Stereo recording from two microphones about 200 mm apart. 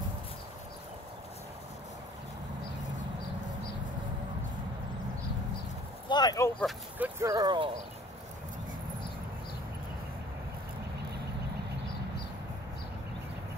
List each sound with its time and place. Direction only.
6.0 s speech: 20° left (ahead or behind)
6.6 s speech: 10° right (ahead or behind)